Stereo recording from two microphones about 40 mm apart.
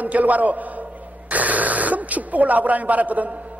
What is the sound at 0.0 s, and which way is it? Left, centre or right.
A man's voice, right.